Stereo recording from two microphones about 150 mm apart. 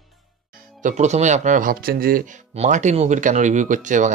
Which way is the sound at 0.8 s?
55° right (ahead or behind).